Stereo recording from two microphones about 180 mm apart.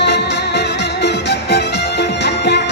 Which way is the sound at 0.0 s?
70° left (ahead or behind).